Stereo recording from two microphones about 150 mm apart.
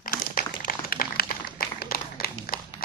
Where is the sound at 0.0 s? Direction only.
75° left (ahead or behind).